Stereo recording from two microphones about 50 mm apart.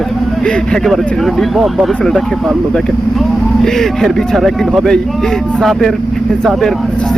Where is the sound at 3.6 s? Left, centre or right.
Centre.